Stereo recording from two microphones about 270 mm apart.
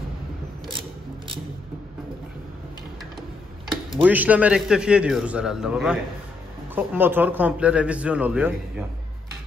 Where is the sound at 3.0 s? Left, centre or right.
Centre.